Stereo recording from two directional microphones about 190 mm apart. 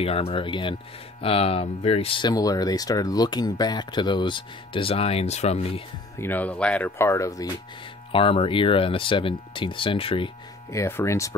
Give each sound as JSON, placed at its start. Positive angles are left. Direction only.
{"t": 0.0, "sound": "speech", "side_deg": 30}
{"t": 6.1, "sound": "speech", "side_deg": 10}
{"t": 8.1, "sound": "speech", "side_deg": 30}
{"t": 10.7, "sound": "speech", "side_deg": 15}